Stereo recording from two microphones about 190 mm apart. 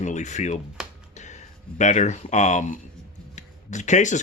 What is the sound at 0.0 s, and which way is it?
Speech, 40° left (ahead or behind).